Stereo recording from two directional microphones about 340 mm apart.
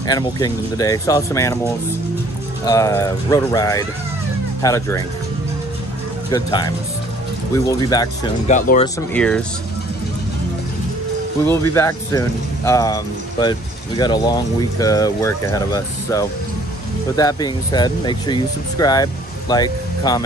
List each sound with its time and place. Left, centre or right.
0.0 s speech: centre
6.3 s speech: centre
8.5 s speech: left
8.8 s speech: centre
11.7 s speech: centre